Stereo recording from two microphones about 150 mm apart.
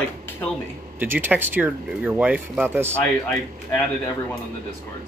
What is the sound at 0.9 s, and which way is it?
Speech, 15° right (ahead or behind).